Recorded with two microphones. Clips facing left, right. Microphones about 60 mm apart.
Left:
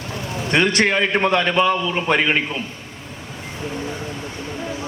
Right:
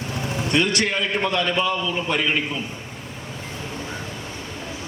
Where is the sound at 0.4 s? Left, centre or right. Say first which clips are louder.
Left 4 dB; left.